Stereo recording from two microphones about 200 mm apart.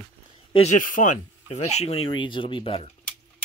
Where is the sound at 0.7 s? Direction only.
40° left (ahead or behind).